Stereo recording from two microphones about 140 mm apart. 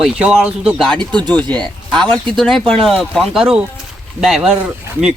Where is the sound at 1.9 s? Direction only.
10° left (ahead or behind).